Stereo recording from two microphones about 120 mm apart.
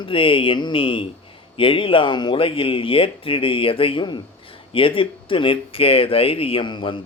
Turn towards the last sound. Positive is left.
turn(degrees=40)  # may be behind; listen again after turning